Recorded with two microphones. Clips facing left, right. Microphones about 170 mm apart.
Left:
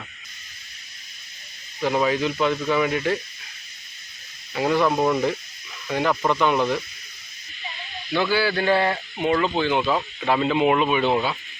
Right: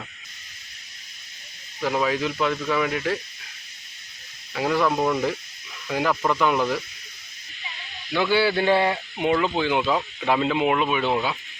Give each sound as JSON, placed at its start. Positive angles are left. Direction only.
{"t": 1.8, "sound": "speech", "side_deg": 0}
{"t": 4.5, "sound": "speech", "side_deg": 0}
{"t": 5.9, "sound": "speech", "side_deg": -5}
{"t": 8.3, "sound": "a man's voice", "side_deg": -25}
{"t": 8.7, "sound": "speech", "side_deg": -10}